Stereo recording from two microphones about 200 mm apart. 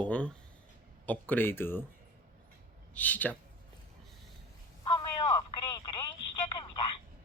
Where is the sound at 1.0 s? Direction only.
10° left (ahead or behind).